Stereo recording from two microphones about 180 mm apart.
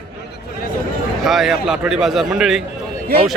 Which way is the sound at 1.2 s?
Centre (ahead or behind).